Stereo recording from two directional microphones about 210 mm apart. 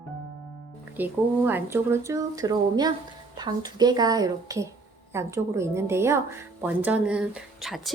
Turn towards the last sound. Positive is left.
turn(degrees=-5)  # may be behind; listen again after turning